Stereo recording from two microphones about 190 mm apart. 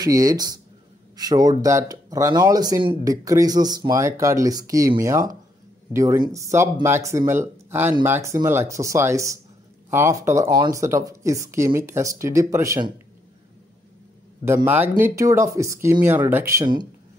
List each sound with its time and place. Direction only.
0.0 s speech: 20° right (ahead or behind)
5.9 s speech: 20° right (ahead or behind)
14.4 s speech: 15° right (ahead or behind)